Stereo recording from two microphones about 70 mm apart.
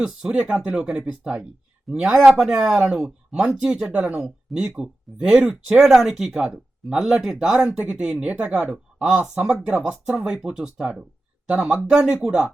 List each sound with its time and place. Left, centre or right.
0.0 s speech: centre
5.8 s speech: centre
9.9 s speech: centre